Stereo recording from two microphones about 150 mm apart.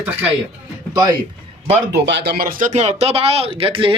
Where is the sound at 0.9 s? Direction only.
25° right (ahead or behind).